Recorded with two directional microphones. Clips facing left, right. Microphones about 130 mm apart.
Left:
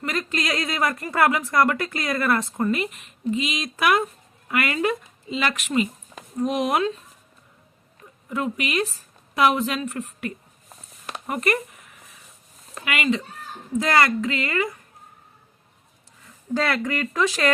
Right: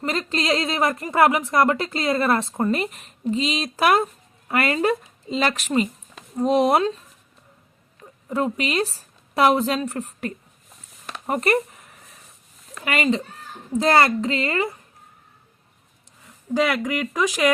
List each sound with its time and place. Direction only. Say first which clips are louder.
0.0 s speech: right 2 dB; 30° right (ahead or behind)
8.3 s speech: right 3 dB; 35° right (ahead or behind)
12.8 s speech: right 2 dB; 35° right (ahead or behind)
16.6 s speech: right 2 dB; 15° right (ahead or behind)